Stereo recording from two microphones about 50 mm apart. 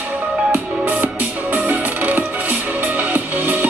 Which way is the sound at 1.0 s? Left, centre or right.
Right.